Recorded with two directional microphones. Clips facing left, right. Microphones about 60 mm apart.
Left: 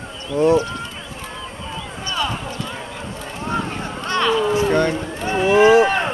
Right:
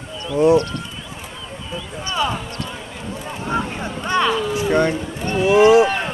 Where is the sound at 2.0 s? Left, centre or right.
Centre.